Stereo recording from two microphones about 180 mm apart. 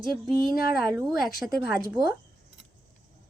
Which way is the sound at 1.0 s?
Centre (ahead or behind).